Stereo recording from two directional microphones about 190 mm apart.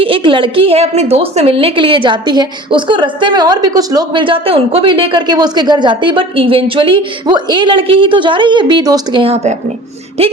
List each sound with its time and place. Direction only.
0.0 s a woman's voice: 25° right (ahead or behind)